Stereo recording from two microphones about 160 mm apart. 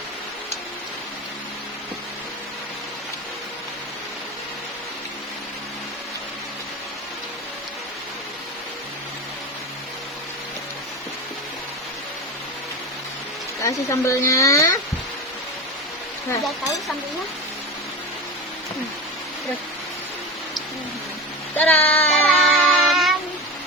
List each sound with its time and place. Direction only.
13.7 s speech: 20° left (ahead or behind)
21.5 s child singing: 10° left (ahead or behind)